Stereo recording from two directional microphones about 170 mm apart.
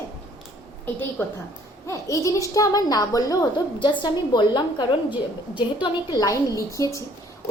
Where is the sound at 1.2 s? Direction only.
10° left (ahead or behind).